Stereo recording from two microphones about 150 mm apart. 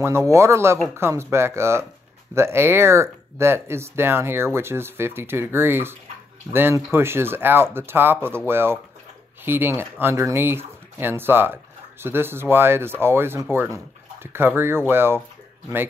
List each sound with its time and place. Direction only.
0.0 s speech: 20° right (ahead or behind)